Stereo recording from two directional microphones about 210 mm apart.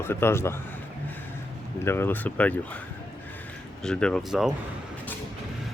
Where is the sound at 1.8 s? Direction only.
10° left (ahead or behind).